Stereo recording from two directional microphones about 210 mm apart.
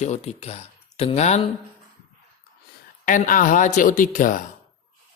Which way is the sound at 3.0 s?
40° left (ahead or behind).